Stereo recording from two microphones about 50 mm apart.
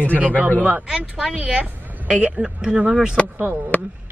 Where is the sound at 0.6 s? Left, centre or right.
Right.